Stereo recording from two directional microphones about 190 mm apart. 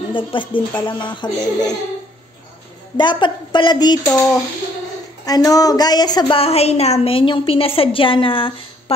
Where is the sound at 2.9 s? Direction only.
25° left (ahead or behind).